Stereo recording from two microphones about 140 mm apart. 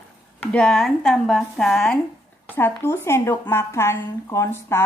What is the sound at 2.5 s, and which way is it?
Speech, 15° left (ahead or behind).